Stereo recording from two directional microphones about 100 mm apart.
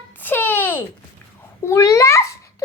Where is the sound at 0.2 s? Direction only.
20° left (ahead or behind).